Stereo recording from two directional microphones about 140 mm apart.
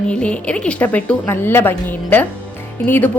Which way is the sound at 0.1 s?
10° left (ahead or behind).